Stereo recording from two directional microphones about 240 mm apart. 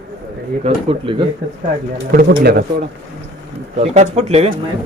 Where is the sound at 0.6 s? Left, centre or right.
Right.